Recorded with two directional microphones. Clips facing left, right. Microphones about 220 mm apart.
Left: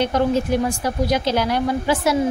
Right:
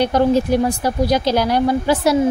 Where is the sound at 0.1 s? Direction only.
35° right (ahead or behind).